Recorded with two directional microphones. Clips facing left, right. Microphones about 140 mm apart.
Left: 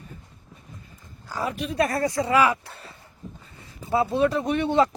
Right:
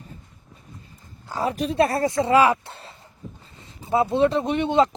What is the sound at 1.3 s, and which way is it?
Speech, 25° right (ahead or behind).